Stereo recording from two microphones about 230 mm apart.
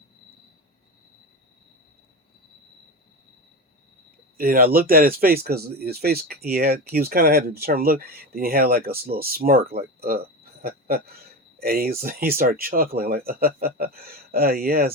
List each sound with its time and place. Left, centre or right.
4.4 s speech: right